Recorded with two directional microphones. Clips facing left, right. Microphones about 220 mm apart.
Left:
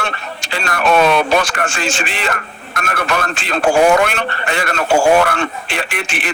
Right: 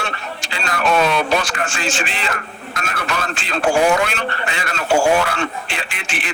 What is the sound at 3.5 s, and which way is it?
Speech, 60° left (ahead or behind).